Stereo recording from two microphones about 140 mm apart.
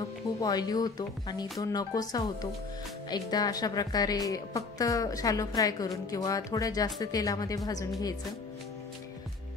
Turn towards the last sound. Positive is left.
turn(degrees=25)  # may be behind; listen again after turning